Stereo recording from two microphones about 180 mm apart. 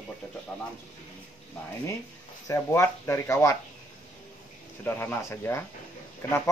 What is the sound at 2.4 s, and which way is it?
Speech, 15° left (ahead or behind).